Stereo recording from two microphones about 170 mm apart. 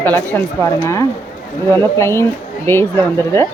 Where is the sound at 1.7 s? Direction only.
15° left (ahead or behind).